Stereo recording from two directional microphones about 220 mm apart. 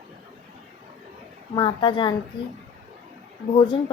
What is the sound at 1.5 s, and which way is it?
Speech, 20° left (ahead or behind).